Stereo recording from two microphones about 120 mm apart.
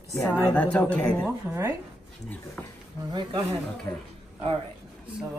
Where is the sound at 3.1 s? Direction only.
40° right (ahead or behind).